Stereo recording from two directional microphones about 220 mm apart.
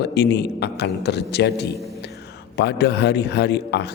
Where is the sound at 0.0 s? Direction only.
50° left (ahead or behind).